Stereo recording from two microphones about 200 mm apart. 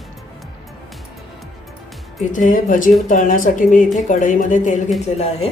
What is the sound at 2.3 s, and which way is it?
Speech, 40° left (ahead or behind).